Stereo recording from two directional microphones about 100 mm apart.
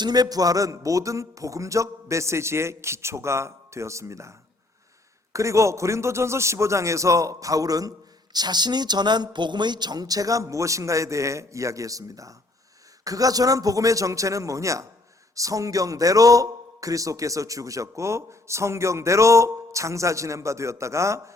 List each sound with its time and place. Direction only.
0.0 s a man's voice: 40° right (ahead or behind)